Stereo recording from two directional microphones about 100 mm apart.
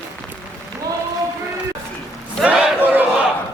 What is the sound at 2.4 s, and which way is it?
Battle cry, 10° right (ahead or behind).